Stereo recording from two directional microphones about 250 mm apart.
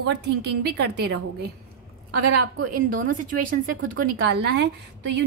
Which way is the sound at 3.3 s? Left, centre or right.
Right.